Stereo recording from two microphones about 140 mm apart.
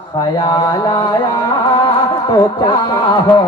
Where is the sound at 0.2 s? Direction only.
30° left (ahead or behind).